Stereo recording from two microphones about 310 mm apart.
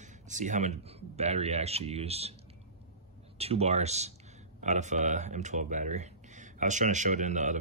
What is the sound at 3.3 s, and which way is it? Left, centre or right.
Speech, centre.